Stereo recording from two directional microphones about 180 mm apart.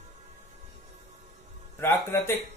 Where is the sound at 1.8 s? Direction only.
15° left (ahead or behind).